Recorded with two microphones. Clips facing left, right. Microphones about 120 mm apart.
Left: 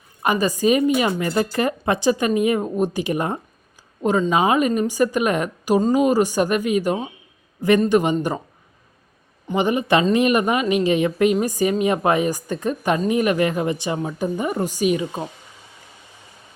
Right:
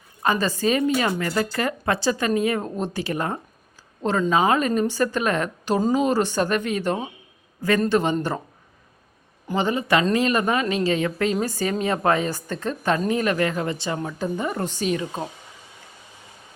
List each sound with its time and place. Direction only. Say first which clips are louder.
0.2 s speech: left 3 dB; 15° left (ahead or behind)
9.6 s speech: left 3 dB; 15° left (ahead or behind)